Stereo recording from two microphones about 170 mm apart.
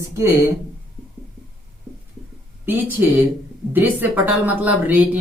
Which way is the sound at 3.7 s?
10° right (ahead or behind).